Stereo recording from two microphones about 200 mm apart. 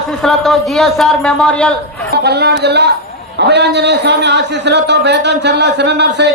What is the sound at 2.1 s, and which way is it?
A man's voice, 55° right (ahead or behind).